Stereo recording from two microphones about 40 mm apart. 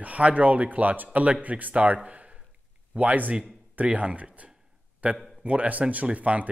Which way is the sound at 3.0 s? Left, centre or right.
Right.